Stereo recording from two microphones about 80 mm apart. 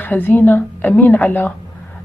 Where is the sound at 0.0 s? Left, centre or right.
Left.